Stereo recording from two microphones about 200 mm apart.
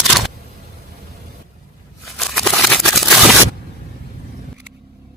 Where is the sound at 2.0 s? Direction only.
Centre (ahead or behind).